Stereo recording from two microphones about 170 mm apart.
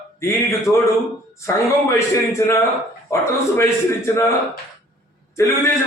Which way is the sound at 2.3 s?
15° left (ahead or behind).